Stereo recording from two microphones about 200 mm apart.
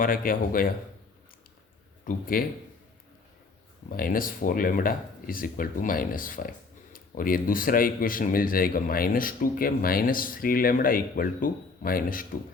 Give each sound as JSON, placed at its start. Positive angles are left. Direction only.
{"t": 0.0, "sound": "speech", "side_deg": 45}
{"t": 2.0, "sound": "speech", "side_deg": 45}
{"t": 3.9, "sound": "speech", "side_deg": 45}